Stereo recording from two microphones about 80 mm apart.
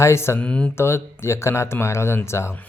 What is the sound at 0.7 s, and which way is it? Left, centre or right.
Speech, left.